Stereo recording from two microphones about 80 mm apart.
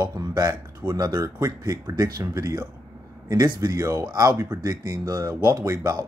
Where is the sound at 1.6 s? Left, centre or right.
Right.